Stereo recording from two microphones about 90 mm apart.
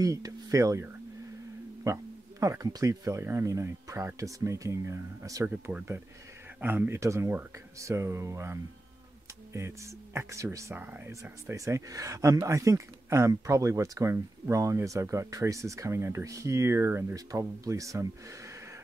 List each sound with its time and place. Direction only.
0.0 s speech: 40° right (ahead or behind)
1.9 s speech: 35° right (ahead or behind)
5.5 s speech: 15° right (ahead or behind); by 18.0 s 35° right (ahead or behind)